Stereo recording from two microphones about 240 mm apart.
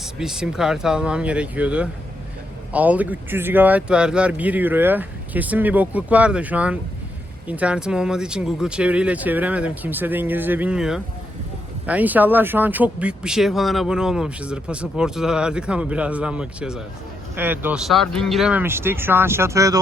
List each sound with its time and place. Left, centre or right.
0.0 s speech: centre